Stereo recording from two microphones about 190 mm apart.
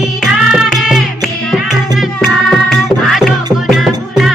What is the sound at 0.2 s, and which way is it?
Music, 5° right (ahead or behind).